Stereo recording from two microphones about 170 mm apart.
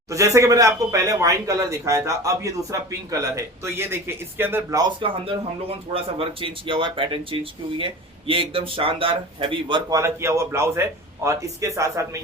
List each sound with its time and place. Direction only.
0.1 s speech: 20° right (ahead or behind)
4.8 s speech: 30° right (ahead or behind)
10.0 s a man's voice: 15° right (ahead or behind)